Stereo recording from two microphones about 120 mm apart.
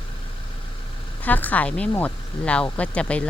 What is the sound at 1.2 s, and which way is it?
Speech, 15° left (ahead or behind).